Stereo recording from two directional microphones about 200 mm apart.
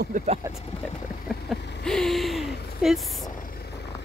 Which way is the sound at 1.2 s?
Centre (ahead or behind).